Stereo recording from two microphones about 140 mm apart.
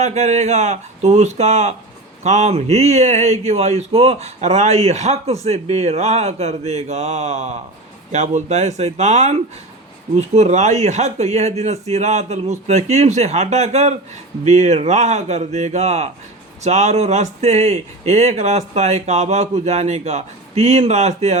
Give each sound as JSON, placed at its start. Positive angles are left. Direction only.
{"t": 0.0, "sound": "speech", "side_deg": -55}